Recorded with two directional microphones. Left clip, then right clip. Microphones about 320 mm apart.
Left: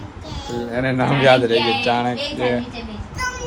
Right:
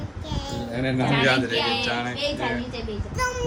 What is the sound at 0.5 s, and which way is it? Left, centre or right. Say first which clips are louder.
A man's voice: left 6 dB; centre.